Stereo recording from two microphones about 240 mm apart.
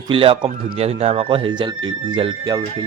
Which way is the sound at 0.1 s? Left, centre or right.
Right.